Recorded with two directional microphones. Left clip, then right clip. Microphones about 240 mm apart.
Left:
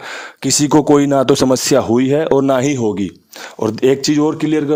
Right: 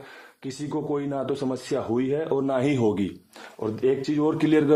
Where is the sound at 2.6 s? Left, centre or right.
Left.